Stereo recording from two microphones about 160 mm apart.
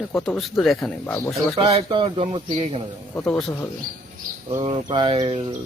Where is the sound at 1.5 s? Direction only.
40° right (ahead or behind).